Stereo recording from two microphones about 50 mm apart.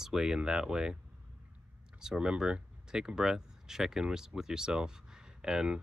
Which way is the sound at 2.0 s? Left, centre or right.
Centre.